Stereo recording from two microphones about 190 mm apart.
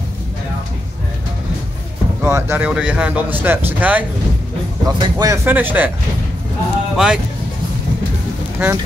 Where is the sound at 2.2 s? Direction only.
15° right (ahead or behind).